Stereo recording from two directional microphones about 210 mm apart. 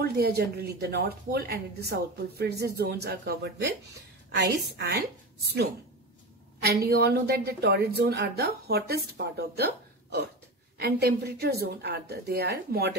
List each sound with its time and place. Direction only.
0.0 s a woman's voice: 50° right (ahead or behind)
6.6 s a woman's voice: 50° right (ahead or behind)